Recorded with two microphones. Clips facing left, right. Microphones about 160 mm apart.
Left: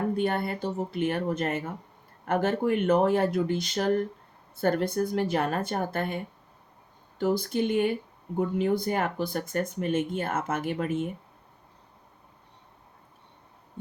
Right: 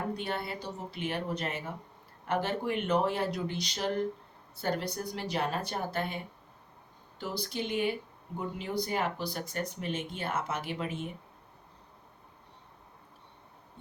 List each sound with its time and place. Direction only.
0.2 s speech: 50° left (ahead or behind)
7.2 s speech: 50° left (ahead or behind)